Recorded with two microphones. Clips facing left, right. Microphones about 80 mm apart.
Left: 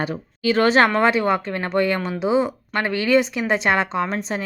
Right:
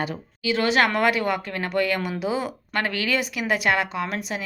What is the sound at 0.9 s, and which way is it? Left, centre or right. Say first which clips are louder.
Speech: left 4 dB; left.